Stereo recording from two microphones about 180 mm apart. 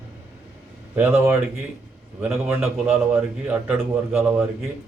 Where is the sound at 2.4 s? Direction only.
10° right (ahead or behind).